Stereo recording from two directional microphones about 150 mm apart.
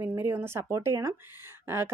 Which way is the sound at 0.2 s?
15° right (ahead or behind).